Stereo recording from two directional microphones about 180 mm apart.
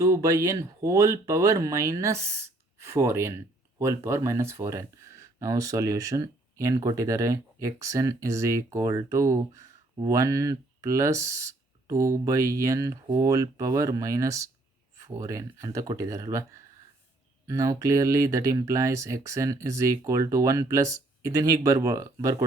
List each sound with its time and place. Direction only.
0.0 s speech: 15° right (ahead or behind)